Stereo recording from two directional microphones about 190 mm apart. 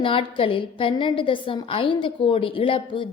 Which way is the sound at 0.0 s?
30° left (ahead or behind).